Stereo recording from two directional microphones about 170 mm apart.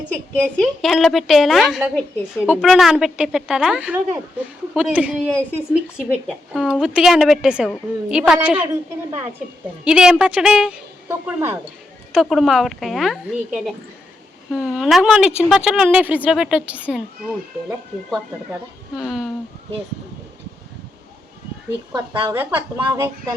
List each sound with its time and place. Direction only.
0.1 s a woman's voice: 5° left (ahead or behind)
5.2 s a woman's voice: 10° left (ahead or behind)
6.0 s a woman's voice: centre (ahead or behind)
12.1 s a woman's voice: centre (ahead or behind)
18.9 s a woman's voice: centre (ahead or behind)
22.1 s speech: 30° right (ahead or behind)
22.4 s a woman's voice: 10° right (ahead or behind)